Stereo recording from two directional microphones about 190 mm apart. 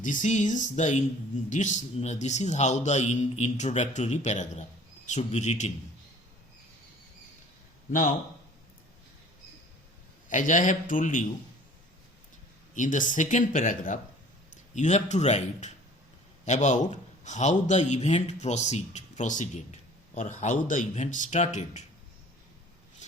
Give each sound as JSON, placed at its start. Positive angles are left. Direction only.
{"t": 0.0, "sound": "a man's voice", "side_deg": 40}
{"t": 10.2, "sound": "speech", "side_deg": 45}
{"t": 12.7, "sound": "a man's voice", "side_deg": 40}